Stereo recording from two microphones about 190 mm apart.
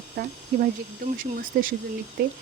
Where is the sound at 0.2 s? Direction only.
50° right (ahead or behind).